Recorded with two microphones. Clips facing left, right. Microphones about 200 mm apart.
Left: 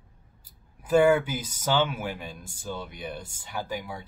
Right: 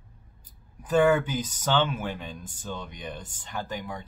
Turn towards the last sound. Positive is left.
turn(degrees=10)  # may be behind; listen again after turning